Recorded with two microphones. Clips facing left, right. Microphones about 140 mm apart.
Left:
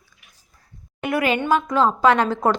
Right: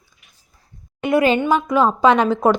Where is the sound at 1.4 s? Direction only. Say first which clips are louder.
Right 2 dB; 15° right (ahead or behind).